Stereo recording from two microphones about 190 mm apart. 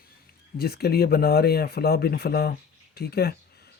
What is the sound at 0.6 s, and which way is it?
Speech, 55° left (ahead or behind).